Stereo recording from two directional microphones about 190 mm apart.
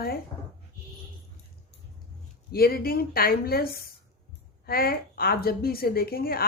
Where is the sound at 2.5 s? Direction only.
55° left (ahead or behind).